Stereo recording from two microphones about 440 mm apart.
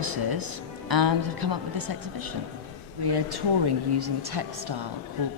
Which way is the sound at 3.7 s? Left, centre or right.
Right.